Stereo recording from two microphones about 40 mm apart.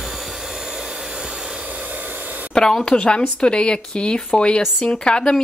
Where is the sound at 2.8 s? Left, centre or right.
Left.